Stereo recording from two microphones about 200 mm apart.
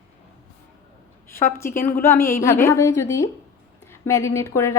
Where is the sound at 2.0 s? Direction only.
15° left (ahead or behind).